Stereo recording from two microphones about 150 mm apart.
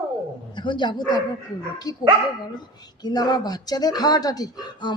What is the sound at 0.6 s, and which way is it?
Speech, 30° left (ahead or behind).